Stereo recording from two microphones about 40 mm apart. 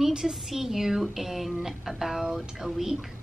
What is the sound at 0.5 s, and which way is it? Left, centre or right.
A woman's voice, centre.